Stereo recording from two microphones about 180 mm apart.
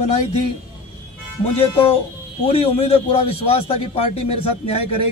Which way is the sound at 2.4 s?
35° left (ahead or behind).